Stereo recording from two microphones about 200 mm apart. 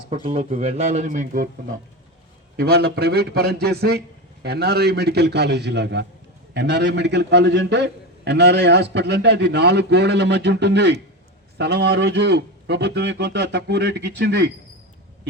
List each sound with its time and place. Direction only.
0.1 s speech: 30° right (ahead or behind)
2.6 s a man's voice: 50° right (ahead or behind)